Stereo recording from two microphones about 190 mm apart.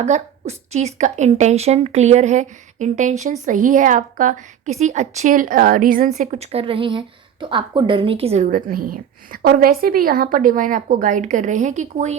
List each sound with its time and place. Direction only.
0.0 s a woman's voice: 35° right (ahead or behind)
6.1 s a woman's voice: 35° right (ahead or behind)